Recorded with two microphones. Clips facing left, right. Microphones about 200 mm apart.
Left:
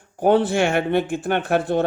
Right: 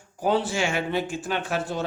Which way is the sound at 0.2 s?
60° left (ahead or behind).